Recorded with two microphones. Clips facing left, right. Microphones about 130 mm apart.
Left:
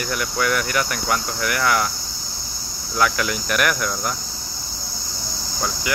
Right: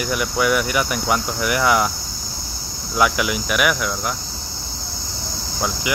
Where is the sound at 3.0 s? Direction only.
10° right (ahead or behind).